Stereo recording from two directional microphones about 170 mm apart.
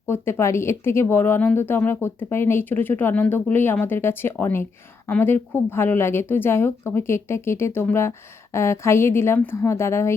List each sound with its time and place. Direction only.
0.1 s speech: 15° left (ahead or behind)